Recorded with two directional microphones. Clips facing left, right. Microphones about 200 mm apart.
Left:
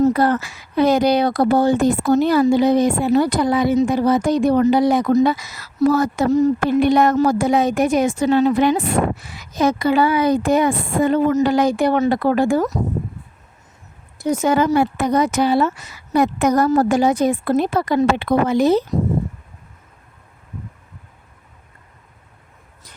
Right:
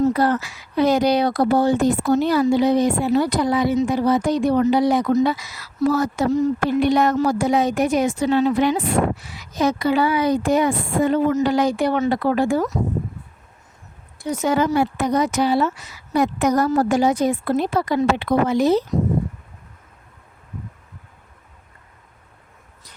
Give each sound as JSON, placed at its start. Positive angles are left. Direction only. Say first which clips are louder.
{"t": 0.0, "sound": "speech", "louder": "left 2 dB", "side_deg": 55}
{"t": 14.2, "sound": "speech", "louder": "left 3 dB", "side_deg": 45}